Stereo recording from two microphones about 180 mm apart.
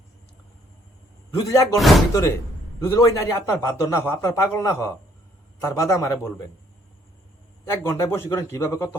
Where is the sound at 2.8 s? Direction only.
15° left (ahead or behind).